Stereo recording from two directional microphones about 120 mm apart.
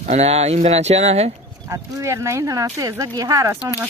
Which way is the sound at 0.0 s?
70° right (ahead or behind).